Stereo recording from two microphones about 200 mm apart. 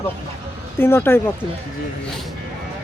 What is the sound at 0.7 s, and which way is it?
Speech, 10° left (ahead or behind).